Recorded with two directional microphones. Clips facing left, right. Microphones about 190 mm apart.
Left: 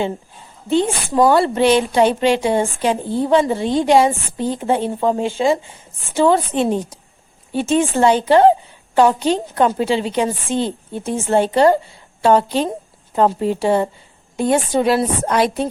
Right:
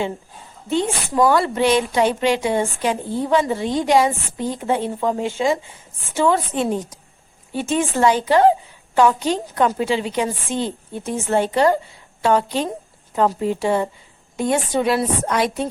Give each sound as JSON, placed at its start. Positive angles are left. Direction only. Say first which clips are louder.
{"t": 0.7, "sound": "a woman's voice", "louder": "left 4 dB", "side_deg": 30}